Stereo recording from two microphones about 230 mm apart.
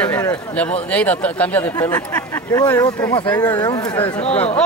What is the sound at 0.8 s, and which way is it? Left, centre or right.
Speech, centre.